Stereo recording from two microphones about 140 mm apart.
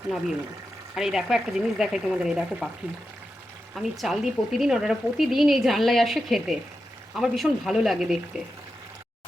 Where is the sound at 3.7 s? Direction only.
Centre (ahead or behind).